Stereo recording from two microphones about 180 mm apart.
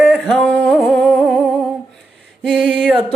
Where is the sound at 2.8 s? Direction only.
10° right (ahead or behind).